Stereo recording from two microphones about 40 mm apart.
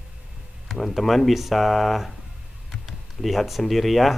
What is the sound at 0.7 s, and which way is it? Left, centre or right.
Speech, centre.